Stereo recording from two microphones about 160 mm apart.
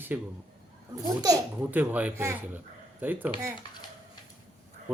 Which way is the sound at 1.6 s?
10° right (ahead or behind).